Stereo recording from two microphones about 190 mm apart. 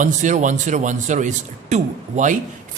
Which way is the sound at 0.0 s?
40° right (ahead or behind).